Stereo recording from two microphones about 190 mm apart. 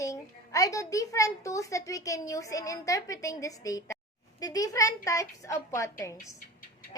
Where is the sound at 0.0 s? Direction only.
15° left (ahead or behind).